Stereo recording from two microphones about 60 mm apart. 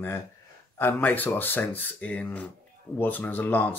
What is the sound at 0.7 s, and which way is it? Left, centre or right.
Speech, left.